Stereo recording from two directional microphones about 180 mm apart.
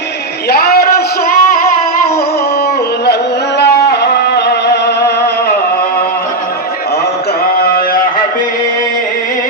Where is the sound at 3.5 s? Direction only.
65° left (ahead or behind).